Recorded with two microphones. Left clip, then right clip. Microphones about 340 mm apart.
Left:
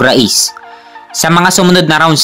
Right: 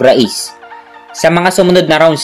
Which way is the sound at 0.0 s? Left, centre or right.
Left.